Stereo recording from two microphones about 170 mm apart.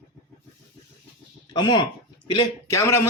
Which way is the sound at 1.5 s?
25° left (ahead or behind).